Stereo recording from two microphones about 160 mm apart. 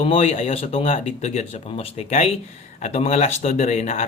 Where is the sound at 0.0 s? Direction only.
40° left (ahead or behind).